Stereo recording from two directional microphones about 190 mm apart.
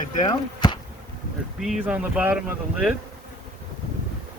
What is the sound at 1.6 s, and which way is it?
Speech, 5° right (ahead or behind).